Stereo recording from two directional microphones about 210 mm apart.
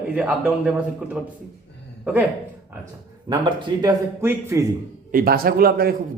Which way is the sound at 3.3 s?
20° right (ahead or behind).